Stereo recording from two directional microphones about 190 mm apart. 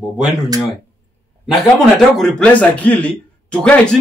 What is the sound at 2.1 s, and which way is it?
Speech, 5° left (ahead or behind).